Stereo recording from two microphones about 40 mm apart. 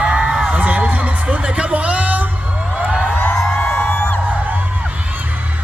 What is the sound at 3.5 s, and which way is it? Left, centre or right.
Music, left.